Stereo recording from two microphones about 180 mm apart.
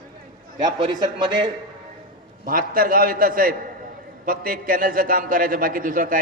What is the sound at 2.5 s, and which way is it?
A man's voice, 50° right (ahead or behind).